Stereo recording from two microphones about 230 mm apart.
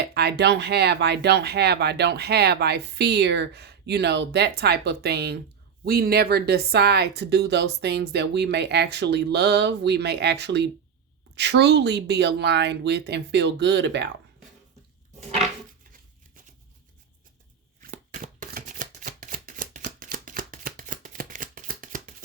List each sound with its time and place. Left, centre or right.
0.0 s speech: right
17.8 s shuffling cards: right